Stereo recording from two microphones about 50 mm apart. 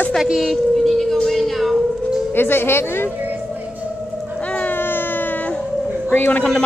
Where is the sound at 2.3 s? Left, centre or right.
Left.